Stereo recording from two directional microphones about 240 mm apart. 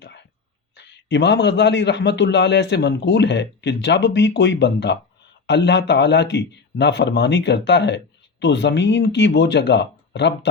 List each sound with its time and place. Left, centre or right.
0.8 s a man's voice: left